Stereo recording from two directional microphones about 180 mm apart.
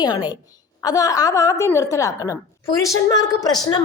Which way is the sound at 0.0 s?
25° left (ahead or behind).